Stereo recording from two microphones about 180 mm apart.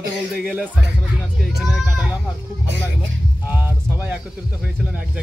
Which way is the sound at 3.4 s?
10° right (ahead or behind).